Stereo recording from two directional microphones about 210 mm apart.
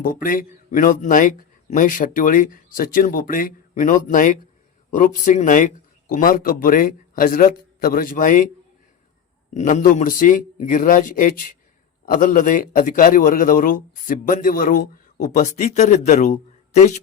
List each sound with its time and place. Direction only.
0.0 s a man's voice: 45° left (ahead or behind)
9.6 s a man's voice: 35° left (ahead or behind)